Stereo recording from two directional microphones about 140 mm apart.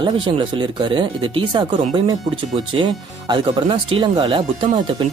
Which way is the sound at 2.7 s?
35° right (ahead or behind).